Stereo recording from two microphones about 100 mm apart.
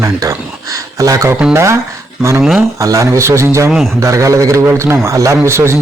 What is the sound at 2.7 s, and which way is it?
Speech, 30° right (ahead or behind).